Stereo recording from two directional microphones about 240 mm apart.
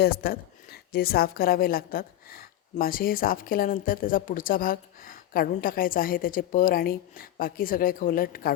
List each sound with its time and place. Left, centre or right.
0.0 s a woman's voice: left